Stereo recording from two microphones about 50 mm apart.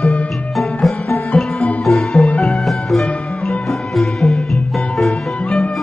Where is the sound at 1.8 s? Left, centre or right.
Centre.